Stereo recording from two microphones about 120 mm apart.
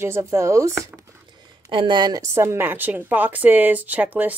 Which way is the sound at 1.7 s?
40° right (ahead or behind).